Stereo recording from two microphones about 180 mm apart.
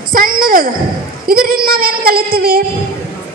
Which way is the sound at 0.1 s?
50° right (ahead or behind).